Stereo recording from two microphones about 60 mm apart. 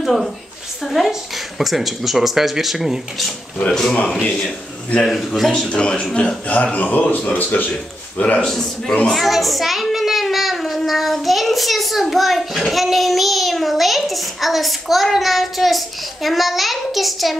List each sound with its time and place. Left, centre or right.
0.0 s a woman's voice: centre
3.5 s a man's voice: centre
5.5 s a man's voice: centre
8.5 s a man's voice: centre
9.1 s child singing: centre
10.9 s a child's voice: centre